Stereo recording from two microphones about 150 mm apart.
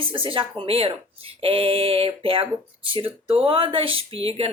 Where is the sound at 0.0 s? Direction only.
35° right (ahead or behind).